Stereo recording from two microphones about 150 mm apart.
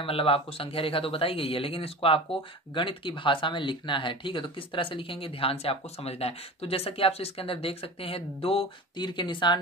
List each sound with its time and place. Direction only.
0.0 s speech: 40° left (ahead or behind)